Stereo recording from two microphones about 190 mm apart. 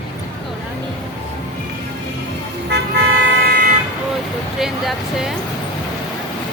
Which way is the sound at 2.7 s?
60° right (ahead or behind).